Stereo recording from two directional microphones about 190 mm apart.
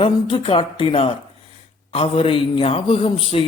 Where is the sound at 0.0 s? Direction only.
30° left (ahead or behind).